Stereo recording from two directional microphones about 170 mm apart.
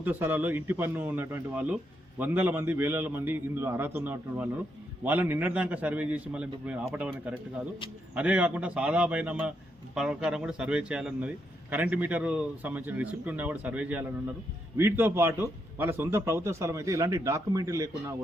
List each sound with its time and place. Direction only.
0.0 s speech: 10° right (ahead or behind)